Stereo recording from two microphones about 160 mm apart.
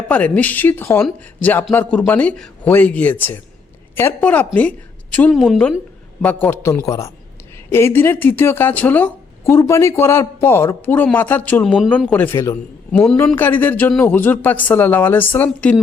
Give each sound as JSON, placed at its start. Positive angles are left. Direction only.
{"t": 0.1, "sound": "speech", "side_deg": 10}
{"t": 5.3, "sound": "a woman's voice", "side_deg": 0}
{"t": 11.6, "sound": "a woman's voice", "side_deg": 0}